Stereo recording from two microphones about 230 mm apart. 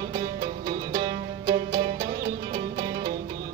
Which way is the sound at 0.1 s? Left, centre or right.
Centre.